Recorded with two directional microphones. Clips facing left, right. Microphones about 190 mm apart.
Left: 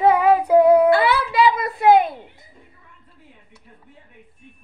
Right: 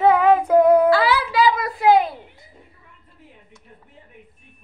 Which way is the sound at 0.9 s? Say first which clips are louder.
Left 1 dB; 25° left (ahead or behind).